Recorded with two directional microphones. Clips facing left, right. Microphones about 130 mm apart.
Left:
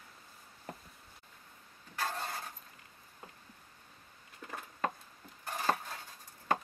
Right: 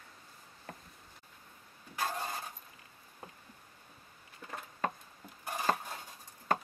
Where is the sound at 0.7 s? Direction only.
20° left (ahead or behind).